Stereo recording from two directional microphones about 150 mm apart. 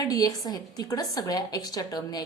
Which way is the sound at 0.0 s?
25° left (ahead or behind).